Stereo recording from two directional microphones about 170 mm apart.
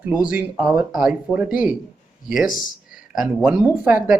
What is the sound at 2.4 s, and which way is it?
Speech, 55° left (ahead or behind).